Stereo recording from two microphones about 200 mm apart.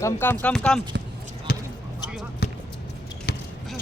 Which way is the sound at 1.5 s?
45° left (ahead or behind).